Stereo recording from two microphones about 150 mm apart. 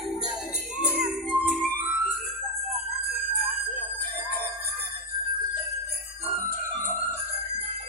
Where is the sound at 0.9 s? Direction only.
5° right (ahead or behind).